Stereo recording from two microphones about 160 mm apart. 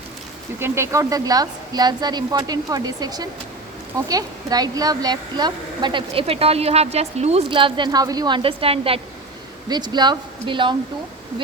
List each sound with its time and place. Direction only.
0.6 s a woman's voice: 15° right (ahead or behind)